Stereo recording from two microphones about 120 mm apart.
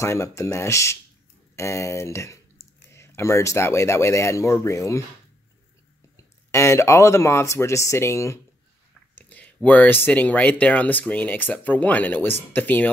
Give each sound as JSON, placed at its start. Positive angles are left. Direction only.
{"t": 0.0, "sound": "speech", "side_deg": 25}
{"t": 6.5, "sound": "speech", "side_deg": 25}
{"t": 9.1, "sound": "speech", "side_deg": 15}